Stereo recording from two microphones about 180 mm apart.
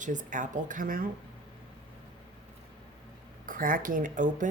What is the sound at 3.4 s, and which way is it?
Speech, 50° right (ahead or behind).